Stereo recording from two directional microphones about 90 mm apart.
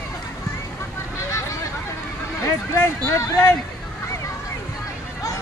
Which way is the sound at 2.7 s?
30° left (ahead or behind).